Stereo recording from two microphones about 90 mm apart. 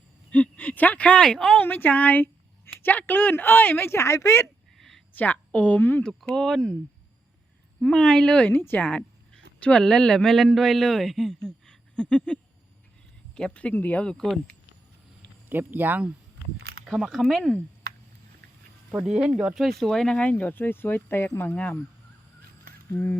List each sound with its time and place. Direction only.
0.3 s speech: 15° left (ahead or behind)
1.6 s speech: 20° left (ahead or behind)
4.8 s a sound: 5° left (ahead or behind)
5.1 s a woman's voice: 15° left (ahead or behind)
6.0 s speech: 10° left (ahead or behind)
7.8 s speech: 5° left (ahead or behind)
8.9 s speech: 10° left (ahead or behind)
11.4 s a sound: 5° left (ahead or behind)
13.3 s speech: 10° left (ahead or behind)
15.4 s speech: 20° right (ahead or behind)
16.8 s speech: 5° right (ahead or behind)
19.0 s speech: 5° right (ahead or behind); by 21.8 s 15° left (ahead or behind)